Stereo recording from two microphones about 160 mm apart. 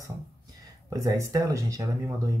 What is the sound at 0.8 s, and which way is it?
Speech, 20° right (ahead or behind).